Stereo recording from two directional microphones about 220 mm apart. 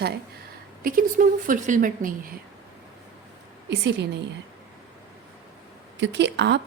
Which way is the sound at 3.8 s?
50° right (ahead or behind).